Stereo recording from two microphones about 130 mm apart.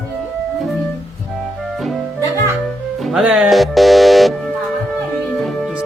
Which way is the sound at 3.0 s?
Centre (ahead or behind).